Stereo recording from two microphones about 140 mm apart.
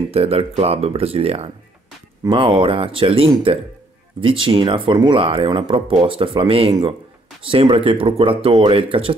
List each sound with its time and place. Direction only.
0.1 s speech: 45° right (ahead or behind)